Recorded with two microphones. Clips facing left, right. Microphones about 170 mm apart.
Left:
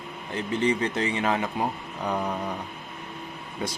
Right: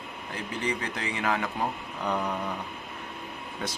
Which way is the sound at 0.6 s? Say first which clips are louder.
Left 7 dB; 25° left (ahead or behind).